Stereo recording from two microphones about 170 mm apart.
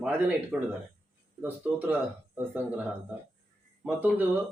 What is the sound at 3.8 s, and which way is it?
Speech, 10° right (ahead or behind).